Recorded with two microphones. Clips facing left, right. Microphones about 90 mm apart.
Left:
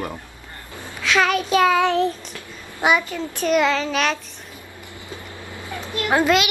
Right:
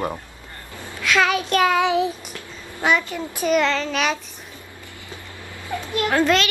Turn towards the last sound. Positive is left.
turn(degrees=10)  # may be behind; listen again after turning